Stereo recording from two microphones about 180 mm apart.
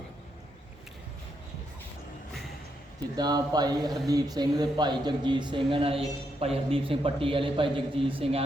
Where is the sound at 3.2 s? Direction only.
20° right (ahead or behind).